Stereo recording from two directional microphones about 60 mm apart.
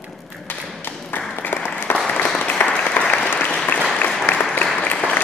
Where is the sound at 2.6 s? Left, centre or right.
Centre.